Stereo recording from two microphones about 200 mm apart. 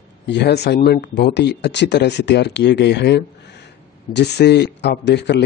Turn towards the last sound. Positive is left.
turn(degrees=60)  # may be behind; listen again after turning